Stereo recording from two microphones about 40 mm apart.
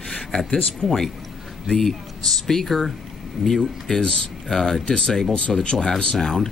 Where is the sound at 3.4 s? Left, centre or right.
Centre.